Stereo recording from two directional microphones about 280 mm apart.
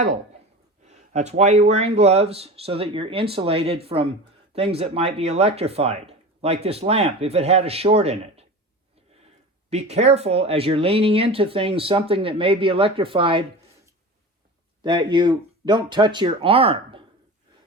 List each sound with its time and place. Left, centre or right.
0.9 s speech: right
9.9 s speech: right
14.8 s speech: centre